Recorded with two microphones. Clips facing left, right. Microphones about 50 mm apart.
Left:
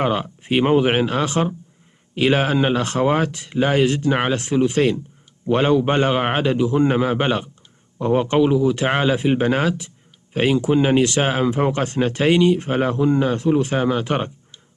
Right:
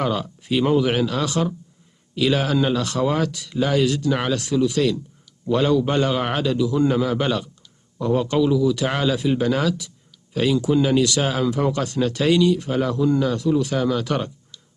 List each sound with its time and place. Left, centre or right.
0.0 s a man's voice: left